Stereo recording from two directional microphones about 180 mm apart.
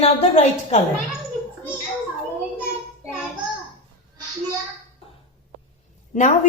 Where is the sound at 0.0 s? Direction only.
35° left (ahead or behind).